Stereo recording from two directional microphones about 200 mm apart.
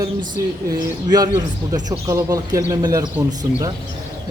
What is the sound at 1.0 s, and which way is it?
Speech, 20° right (ahead or behind).